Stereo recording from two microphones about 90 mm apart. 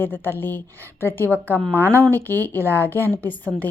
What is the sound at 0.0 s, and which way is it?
Speech, 20° left (ahead or behind).